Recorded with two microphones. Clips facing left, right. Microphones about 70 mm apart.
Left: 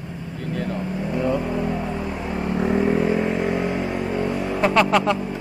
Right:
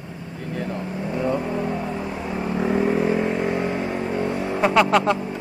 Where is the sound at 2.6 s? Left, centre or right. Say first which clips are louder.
Left 1 dB; centre.